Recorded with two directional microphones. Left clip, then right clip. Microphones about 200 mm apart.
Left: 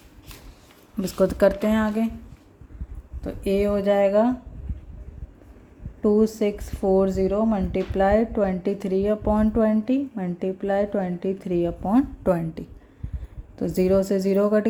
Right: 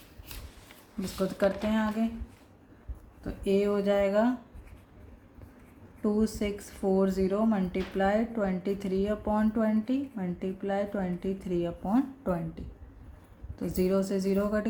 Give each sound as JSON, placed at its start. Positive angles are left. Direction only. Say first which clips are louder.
{"t": 1.0, "sound": "a woman's voice", "louder": "left 9 dB", "side_deg": 40}
{"t": 3.2, "sound": "a woman's voice", "louder": "left 5 dB", "side_deg": 40}
{"t": 6.0, "sound": "a woman's voice", "louder": "left 10 dB", "side_deg": 25}